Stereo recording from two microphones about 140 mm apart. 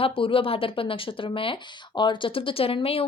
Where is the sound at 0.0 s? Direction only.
40° left (ahead or behind).